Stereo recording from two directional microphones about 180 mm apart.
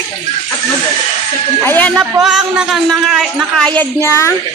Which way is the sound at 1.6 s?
10° left (ahead or behind).